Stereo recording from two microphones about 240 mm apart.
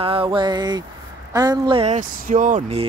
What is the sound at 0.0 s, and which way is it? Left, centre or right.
Speech, right.